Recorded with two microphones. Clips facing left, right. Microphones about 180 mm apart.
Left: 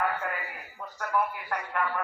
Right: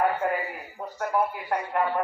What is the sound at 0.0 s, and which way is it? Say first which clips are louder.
A man's voice: right 6 dB; 30° right (ahead or behind).